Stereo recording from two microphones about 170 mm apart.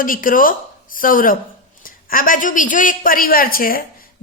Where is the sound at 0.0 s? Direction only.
55° left (ahead or behind).